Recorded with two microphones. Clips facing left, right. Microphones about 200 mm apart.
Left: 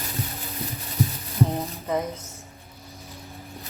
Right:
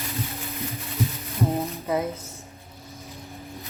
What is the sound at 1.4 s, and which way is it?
Music, centre (ahead or behind).